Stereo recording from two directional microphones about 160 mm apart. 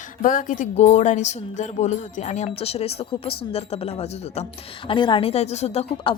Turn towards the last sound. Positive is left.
turn(degrees=40)  # may be behind; listen again after turning